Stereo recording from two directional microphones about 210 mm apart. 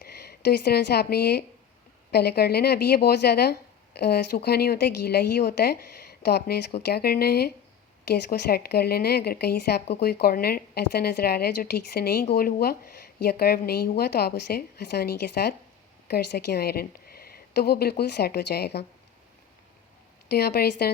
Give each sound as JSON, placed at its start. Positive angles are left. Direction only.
{"t": 0.0, "sound": "a woman's voice", "side_deg": 50}
{"t": 20.3, "sound": "a woman's voice", "side_deg": 50}